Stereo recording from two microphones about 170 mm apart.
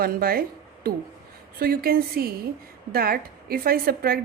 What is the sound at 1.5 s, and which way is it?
A woman's voice, 60° right (ahead or behind).